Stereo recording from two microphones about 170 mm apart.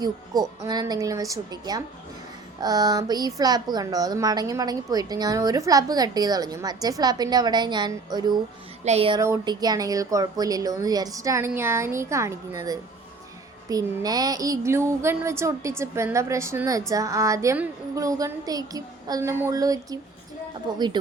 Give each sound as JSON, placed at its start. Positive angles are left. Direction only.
{"t": 0.6, "sound": "a woman's voice", "side_deg": -25}
{"t": 8.8, "sound": "music", "side_deg": -40}
{"t": 9.1, "sound": "a woman's voice", "side_deg": -20}
{"t": 13.7, "sound": "a woman's voice", "side_deg": -20}